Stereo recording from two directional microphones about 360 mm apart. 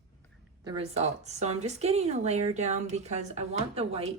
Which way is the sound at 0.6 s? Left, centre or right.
Centre.